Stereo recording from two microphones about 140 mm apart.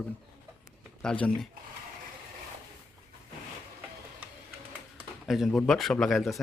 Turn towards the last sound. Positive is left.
turn(degrees=0)  # may be behind; listen again after turning